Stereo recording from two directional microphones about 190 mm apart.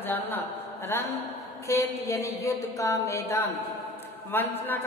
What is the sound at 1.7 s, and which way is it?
A woman's voice, 15° left (ahead or behind).